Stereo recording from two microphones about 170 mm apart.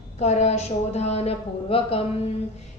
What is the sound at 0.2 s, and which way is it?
A woman's voice, 40° left (ahead or behind).